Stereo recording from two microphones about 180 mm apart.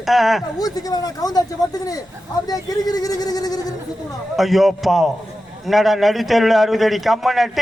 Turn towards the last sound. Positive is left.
turn(degrees=0)  # may be behind; listen again after turning